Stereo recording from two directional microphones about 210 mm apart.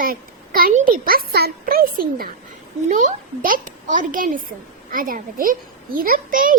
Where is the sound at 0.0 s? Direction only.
45° right (ahead or behind).